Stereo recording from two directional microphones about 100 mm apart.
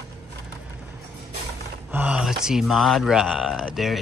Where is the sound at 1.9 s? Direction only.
15° right (ahead or behind).